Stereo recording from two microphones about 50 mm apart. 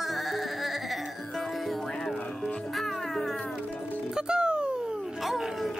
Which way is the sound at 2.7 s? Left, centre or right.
Centre.